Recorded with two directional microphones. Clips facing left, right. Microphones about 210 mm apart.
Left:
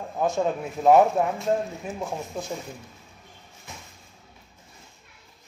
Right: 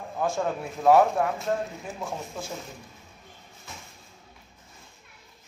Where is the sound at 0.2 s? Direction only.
20° left (ahead or behind).